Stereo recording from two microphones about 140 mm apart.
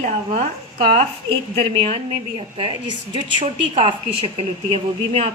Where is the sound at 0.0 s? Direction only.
50° right (ahead or behind).